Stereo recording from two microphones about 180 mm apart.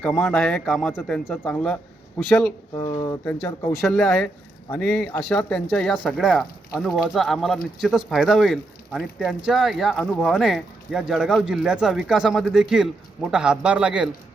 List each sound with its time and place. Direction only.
0.0 s speech: 5° left (ahead or behind)
2.7 s speech: 25° left (ahead or behind)
3.8 s speech: centre (ahead or behind)